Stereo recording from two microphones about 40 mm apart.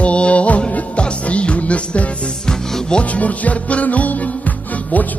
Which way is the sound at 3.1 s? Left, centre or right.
Left.